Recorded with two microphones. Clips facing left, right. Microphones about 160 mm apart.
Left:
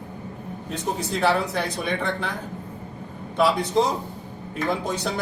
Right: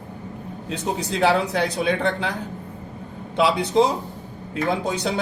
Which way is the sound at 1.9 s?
75° right (ahead or behind).